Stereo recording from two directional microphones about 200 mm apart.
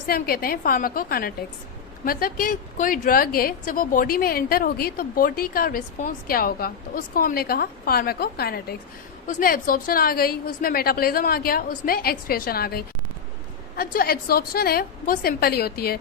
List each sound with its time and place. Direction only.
0.1 s a woman's voice: 50° left (ahead or behind)